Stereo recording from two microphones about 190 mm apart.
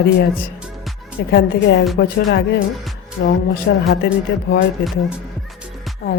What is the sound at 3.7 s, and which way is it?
Music, 65° left (ahead or behind).